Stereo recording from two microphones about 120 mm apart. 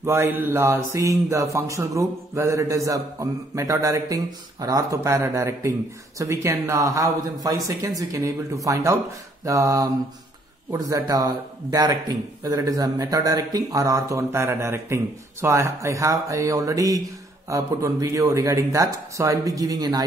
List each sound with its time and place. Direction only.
0.0 s speech: 20° right (ahead or behind)